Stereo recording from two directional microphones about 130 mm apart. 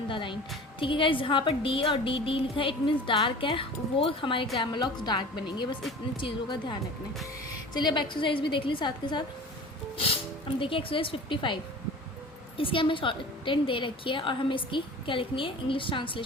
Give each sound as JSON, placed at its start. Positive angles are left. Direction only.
{"t": 0.1, "sound": "a woman's voice", "side_deg": 40}
{"t": 10.6, "sound": "speech", "side_deg": 45}
{"t": 12.5, "sound": "a woman's voice", "side_deg": 40}